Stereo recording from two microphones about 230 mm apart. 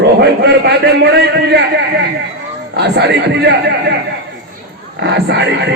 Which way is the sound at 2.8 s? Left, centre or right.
Right.